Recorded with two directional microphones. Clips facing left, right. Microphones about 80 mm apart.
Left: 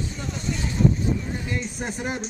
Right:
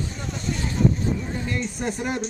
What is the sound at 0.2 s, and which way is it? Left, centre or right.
Vehicle, centre.